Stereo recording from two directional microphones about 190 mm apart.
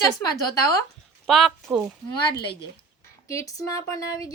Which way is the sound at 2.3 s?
60° left (ahead or behind).